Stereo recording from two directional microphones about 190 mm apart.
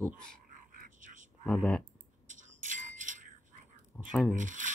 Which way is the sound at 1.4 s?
5° left (ahead or behind).